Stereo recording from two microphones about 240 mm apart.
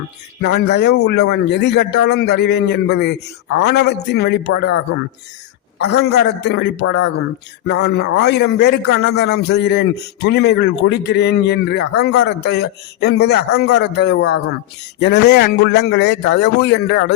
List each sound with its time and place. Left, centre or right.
0.6 s a man's voice: left
6.0 s a man's voice: left